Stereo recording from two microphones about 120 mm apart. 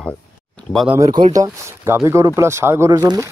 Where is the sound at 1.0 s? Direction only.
35° right (ahead or behind).